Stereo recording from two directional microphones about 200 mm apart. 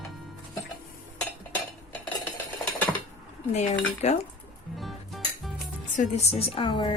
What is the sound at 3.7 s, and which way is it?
Cutlery, 35° left (ahead or behind).